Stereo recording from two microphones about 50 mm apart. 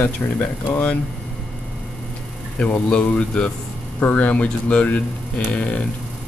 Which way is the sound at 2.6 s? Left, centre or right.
Left.